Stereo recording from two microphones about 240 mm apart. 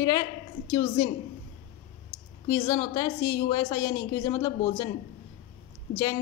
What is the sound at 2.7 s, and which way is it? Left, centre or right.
A woman's voice, centre.